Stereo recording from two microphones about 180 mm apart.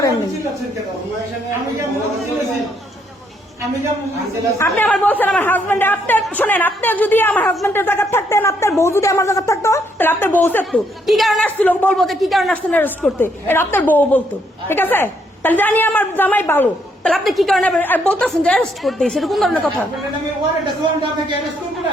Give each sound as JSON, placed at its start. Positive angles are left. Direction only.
{"t": 4.5, "sound": "a woman's voice", "side_deg": 10}
{"t": 10.7, "sound": "a woman's voice", "side_deg": 0}
{"t": 12.7, "sound": "a woman's voice", "side_deg": 10}